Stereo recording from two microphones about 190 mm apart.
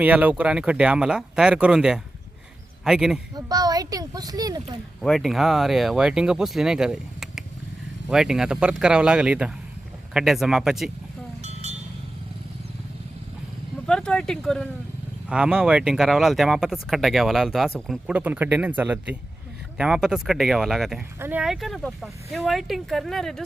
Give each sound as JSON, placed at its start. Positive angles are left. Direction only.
{"t": 0.0, "sound": "speech", "side_deg": -10}
{"t": 3.3, "sound": "speech", "side_deg": -20}
{"t": 5.0, "sound": "speech", "side_deg": 0}
{"t": 13.8, "sound": "speech", "side_deg": 5}